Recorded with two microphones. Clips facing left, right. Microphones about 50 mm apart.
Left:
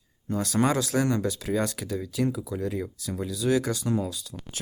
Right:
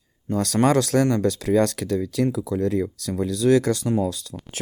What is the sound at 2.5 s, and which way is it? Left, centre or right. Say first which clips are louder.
Speech: right 7 dB; right.